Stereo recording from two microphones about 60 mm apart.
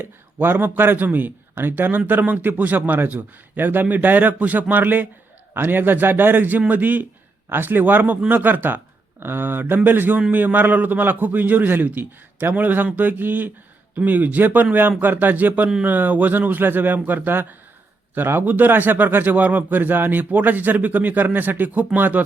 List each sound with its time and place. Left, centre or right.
0.0 s a man's voice: right